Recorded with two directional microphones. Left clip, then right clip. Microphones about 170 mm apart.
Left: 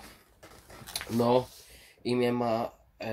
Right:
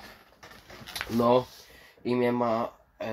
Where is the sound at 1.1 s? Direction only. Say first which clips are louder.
Right 2 dB; 15° left (ahead or behind).